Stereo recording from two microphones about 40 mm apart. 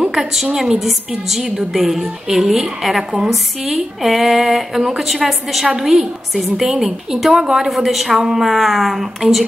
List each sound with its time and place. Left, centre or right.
0.1 s a woman's voice: centre